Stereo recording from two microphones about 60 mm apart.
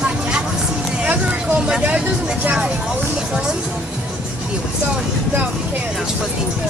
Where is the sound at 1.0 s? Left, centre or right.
Right.